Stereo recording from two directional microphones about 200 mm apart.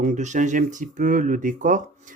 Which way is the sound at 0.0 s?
35° right (ahead or behind).